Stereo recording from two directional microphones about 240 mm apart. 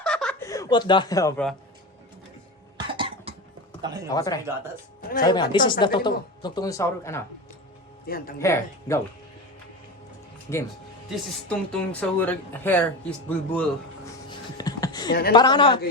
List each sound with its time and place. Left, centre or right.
0.0 s speech: centre
2.7 s cough: centre
3.8 s speech: centre
4.1 s a woman's voice: centre
8.0 s speech: left
8.4 s a woman's voice: centre
10.5 s a woman's voice: centre
11.1 s speech: centre
14.3 s a sound: centre
15.3 s a woman's voice: centre